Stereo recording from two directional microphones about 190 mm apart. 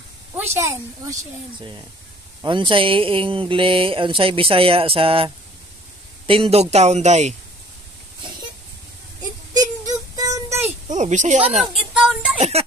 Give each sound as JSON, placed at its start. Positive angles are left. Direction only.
{"t": 0.4, "sound": "a woman's voice", "side_deg": -15}
{"t": 2.4, "sound": "speech", "side_deg": -25}
{"t": 10.1, "sound": "a sound", "side_deg": -20}
{"t": 10.9, "sound": "speech", "side_deg": -40}
{"t": 11.7, "sound": "a sound", "side_deg": 0}
{"t": 12.4, "sound": "speech", "side_deg": -35}